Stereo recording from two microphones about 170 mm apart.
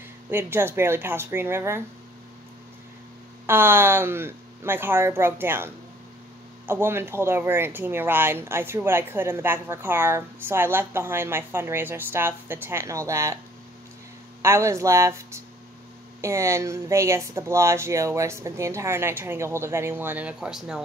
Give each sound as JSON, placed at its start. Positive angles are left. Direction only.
{"t": 0.3, "sound": "speech", "side_deg": -10}
{"t": 3.4, "sound": "speech", "side_deg": -10}
{"t": 14.4, "sound": "speech", "side_deg": -15}